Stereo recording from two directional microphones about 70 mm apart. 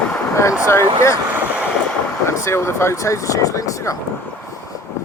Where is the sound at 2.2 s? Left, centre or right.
Left.